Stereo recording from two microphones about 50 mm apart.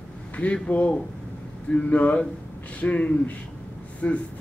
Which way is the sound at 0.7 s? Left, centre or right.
Left.